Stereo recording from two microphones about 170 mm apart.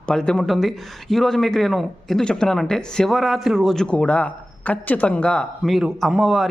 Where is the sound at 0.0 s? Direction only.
5° left (ahead or behind).